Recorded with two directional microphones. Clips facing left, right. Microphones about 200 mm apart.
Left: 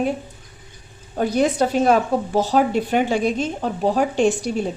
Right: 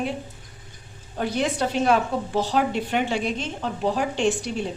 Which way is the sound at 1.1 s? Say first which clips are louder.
Left 6 dB; 45° left (ahead or behind).